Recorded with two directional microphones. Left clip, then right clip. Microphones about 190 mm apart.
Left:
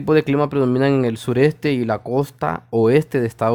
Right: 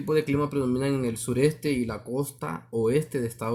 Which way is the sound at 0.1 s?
45° left (ahead or behind).